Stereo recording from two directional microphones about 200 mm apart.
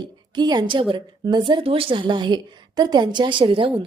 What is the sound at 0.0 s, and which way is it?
A woman's voice, 20° right (ahead or behind).